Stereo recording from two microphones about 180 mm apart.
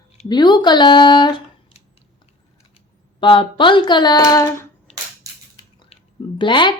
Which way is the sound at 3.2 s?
25° left (ahead or behind).